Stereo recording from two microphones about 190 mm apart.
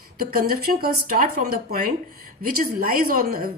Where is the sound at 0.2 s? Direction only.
50° right (ahead or behind).